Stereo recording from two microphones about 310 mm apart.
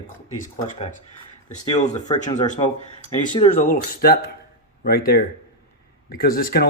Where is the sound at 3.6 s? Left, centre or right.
Left.